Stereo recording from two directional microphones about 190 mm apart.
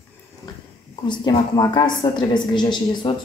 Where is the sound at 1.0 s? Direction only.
25° left (ahead or behind).